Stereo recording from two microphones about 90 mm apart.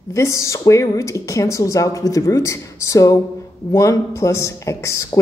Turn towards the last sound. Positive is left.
turn(degrees=35)  # may be behind; listen again after turning